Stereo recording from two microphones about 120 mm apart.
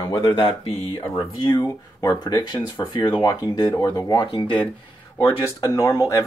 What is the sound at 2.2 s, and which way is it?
Speech, 35° left (ahead or behind).